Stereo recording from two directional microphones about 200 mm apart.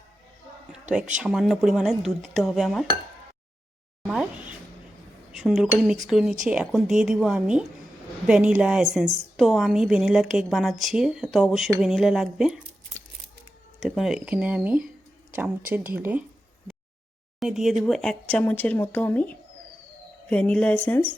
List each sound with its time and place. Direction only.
0.9 s speech: 40° right (ahead or behind)
1.2 s a woman's voice: centre (ahead or behind)
4.0 s a sound: 5° right (ahead or behind)
5.3 s cutlery: centre (ahead or behind)
6.1 s a woman's voice: 5° right (ahead or behind)
13.7 s a woman's voice: centre (ahead or behind)
17.4 s speech: centre (ahead or behind)